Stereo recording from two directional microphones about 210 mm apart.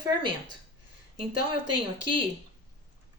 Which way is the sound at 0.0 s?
20° right (ahead or behind).